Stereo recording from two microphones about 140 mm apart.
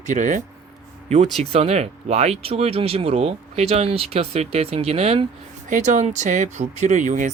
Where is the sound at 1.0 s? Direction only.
55° right (ahead or behind).